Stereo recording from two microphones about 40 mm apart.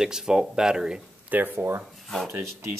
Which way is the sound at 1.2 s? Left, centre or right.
Right.